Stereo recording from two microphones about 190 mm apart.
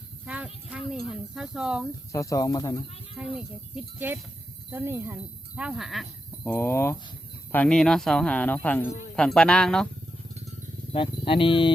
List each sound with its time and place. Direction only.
0.3 s speech: 5° right (ahead or behind)
2.1 s speech: 15° left (ahead or behind)
3.2 s speech: 5° right (ahead or behind)
6.4 s speech: 10° left (ahead or behind)
10.9 s speech: 25° left (ahead or behind)